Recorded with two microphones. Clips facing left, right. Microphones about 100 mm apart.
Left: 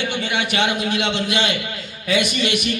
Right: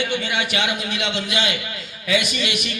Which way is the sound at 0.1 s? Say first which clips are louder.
Left 1 dB; 25° left (ahead or behind).